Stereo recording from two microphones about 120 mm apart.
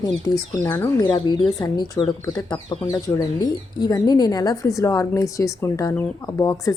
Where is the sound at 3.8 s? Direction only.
35° left (ahead or behind).